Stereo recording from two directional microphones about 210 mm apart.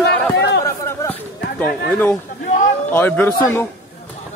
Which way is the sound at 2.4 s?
35° left (ahead or behind).